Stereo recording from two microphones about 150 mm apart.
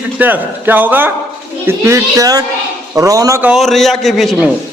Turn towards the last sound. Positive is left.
turn(degrees=0)  # may be behind; listen again after turning